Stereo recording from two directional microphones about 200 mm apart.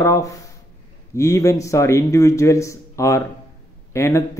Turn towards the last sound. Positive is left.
turn(degrees=15)  # may be behind; listen again after turning